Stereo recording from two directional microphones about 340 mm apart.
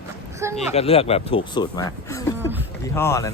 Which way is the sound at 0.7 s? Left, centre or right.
Centre.